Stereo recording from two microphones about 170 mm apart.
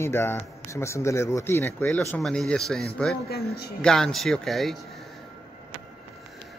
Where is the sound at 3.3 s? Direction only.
65° left (ahead or behind).